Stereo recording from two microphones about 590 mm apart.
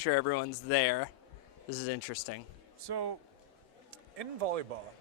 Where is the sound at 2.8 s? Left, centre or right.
Right.